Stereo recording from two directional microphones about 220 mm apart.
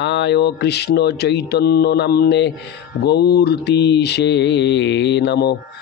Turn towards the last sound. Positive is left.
turn(degrees=50)  # may be behind; listen again after turning